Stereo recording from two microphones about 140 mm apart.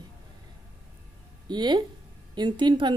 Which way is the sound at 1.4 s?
30° right (ahead or behind).